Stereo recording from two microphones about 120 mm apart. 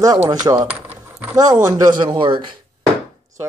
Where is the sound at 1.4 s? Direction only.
30° right (ahead or behind).